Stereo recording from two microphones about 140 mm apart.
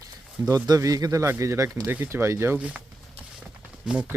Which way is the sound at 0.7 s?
25° right (ahead or behind).